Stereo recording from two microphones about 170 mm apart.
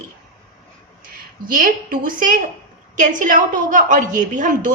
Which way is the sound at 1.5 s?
55° right (ahead or behind).